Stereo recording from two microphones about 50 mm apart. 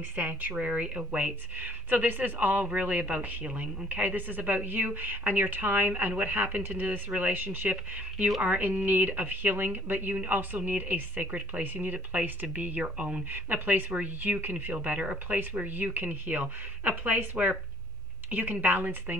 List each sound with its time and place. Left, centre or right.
0.1 s speech: right
7.1 s speech: right
7.3 s speech: right
7.7 s speech: right
13.3 s speech: right